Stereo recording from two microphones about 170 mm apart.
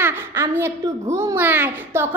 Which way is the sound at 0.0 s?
15° right (ahead or behind).